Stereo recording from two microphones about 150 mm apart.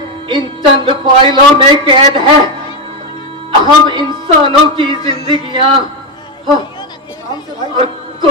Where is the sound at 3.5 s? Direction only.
30° right (ahead or behind).